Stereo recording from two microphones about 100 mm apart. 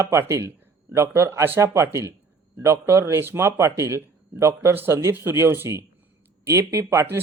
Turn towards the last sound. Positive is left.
turn(degrees=-30)  # may be behind; listen again after turning